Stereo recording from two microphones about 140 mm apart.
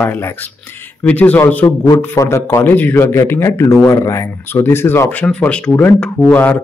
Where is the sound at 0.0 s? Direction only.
10° left (ahead or behind).